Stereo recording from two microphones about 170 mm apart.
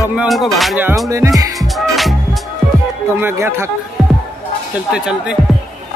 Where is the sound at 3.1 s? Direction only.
15° right (ahead or behind).